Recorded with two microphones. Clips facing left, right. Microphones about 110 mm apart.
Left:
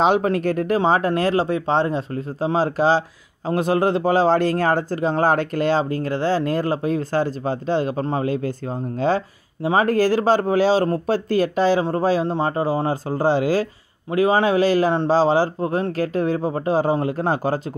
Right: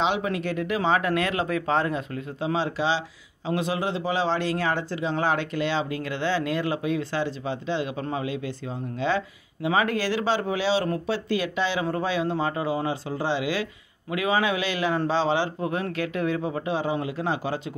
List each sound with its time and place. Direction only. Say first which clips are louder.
0.0 s speech: left 7 dB; 45° left (ahead or behind)